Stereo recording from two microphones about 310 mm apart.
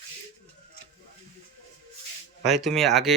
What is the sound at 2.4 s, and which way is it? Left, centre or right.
Speech, centre.